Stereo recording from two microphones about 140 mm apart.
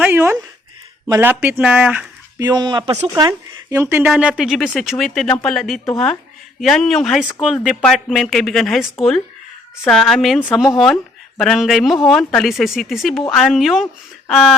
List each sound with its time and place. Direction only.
0.0 s a sound: 15° right (ahead or behind)
1.2 s speech: 15° right (ahead or behind)
2.4 s speech: 30° right (ahead or behind)
3.2 s speech: 25° right (ahead or behind)
4.0 s speech: 5° right (ahead or behind)